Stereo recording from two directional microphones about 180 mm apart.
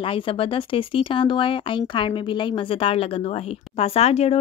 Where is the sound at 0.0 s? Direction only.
30° left (ahead or behind).